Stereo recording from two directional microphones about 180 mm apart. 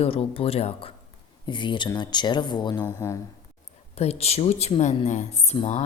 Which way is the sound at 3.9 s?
35° left (ahead or behind).